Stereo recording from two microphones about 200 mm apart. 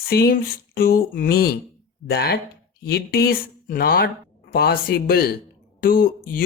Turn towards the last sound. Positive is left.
turn(degrees=45)  # may be behind; listen again after turning